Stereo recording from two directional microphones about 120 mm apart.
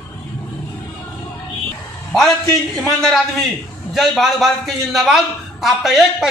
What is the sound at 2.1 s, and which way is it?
A man's voice, centre (ahead or behind).